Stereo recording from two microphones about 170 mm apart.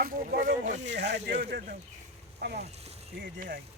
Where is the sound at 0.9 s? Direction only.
90° right; by 2.6 s 75° right (ahead or behind).